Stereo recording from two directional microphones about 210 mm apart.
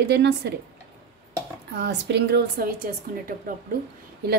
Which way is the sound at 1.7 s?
55° right (ahead or behind).